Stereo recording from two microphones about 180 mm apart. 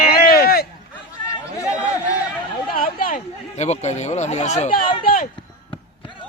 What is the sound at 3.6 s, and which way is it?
Speech, 40° left (ahead or behind).